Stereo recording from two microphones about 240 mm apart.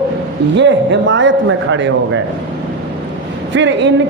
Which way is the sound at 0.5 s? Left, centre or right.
Right.